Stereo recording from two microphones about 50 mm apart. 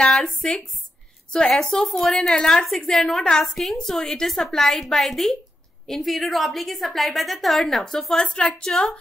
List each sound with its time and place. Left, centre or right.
0.0 s a woman's voice: centre